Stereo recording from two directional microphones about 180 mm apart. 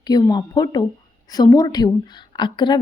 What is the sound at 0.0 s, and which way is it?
A woman's voice, 20° left (ahead or behind).